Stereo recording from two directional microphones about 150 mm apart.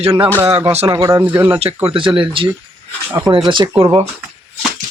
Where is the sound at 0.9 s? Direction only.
25° right (ahead or behind).